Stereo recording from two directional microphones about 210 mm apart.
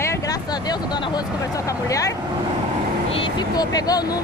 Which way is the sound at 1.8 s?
15° left (ahead or behind).